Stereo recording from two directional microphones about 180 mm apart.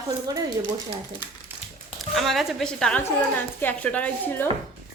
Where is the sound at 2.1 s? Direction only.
Centre (ahead or behind).